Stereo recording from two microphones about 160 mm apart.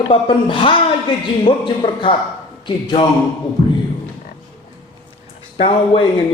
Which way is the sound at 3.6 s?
30° left (ahead or behind).